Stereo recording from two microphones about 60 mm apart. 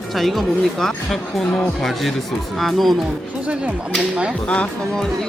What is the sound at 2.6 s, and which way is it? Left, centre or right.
Speech, centre.